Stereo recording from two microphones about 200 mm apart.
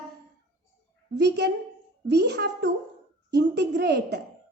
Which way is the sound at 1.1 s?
55° right (ahead or behind).